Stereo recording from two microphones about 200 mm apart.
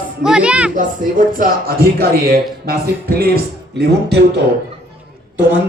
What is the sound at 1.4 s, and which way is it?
Speech, 50° right (ahead or behind).